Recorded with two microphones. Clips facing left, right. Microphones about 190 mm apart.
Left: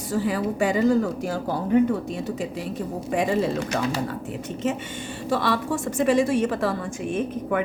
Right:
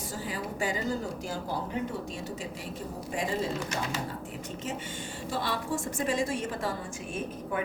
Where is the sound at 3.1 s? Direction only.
65° left (ahead or behind).